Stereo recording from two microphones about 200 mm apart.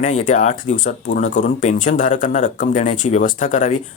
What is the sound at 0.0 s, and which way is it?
Speech, 35° left (ahead or behind).